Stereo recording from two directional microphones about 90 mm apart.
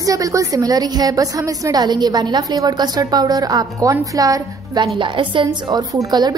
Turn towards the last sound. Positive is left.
turn(degrees=-50)  # may be behind; listen again after turning